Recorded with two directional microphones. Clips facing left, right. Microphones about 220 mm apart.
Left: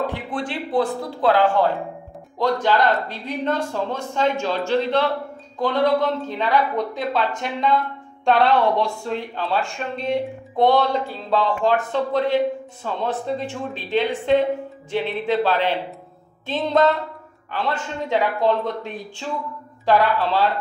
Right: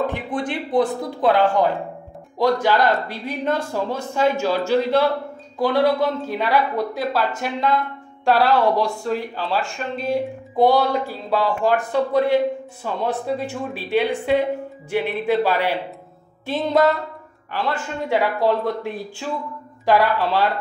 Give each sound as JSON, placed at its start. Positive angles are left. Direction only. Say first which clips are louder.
{"t": 0.1, "sound": "speech", "louder": "right 2 dB", "side_deg": -20}
{"t": 18.0, "sound": "speech", "louder": "right 1 dB", "side_deg": -10}